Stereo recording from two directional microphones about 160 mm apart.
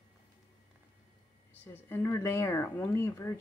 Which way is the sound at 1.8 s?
15° left (ahead or behind).